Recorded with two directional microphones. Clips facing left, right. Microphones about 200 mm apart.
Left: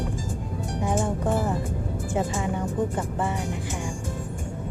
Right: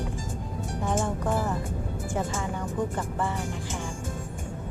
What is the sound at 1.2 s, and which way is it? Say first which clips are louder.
Speech: left 3 dB; 25° left (ahead or behind).